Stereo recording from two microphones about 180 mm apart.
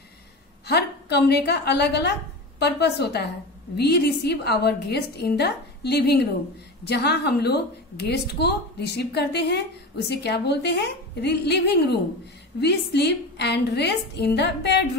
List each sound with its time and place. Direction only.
0.7 s a woman's voice: 65° left (ahead or behind)